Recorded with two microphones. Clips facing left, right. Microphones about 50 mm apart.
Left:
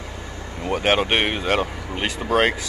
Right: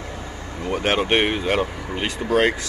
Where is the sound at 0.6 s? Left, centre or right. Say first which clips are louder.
Left 1 dB; centre.